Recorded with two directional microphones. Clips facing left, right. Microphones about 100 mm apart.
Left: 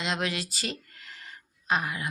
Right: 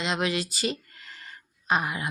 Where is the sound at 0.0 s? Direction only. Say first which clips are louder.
Right 3 dB; 5° right (ahead or behind).